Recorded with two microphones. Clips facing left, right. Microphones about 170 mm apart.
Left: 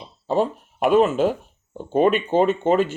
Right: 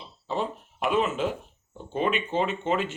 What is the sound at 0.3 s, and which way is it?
Speech, 40° left (ahead or behind).